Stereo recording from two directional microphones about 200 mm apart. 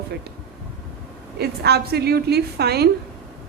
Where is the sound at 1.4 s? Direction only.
55° right (ahead or behind).